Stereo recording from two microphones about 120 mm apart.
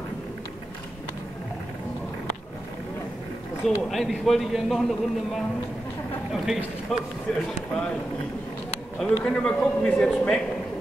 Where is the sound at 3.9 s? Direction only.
Centre (ahead or behind).